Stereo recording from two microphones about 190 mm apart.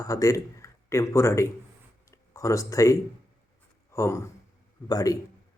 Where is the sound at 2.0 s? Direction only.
15° left (ahead or behind).